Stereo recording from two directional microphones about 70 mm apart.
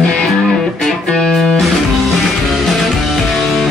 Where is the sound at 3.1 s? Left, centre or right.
Centre.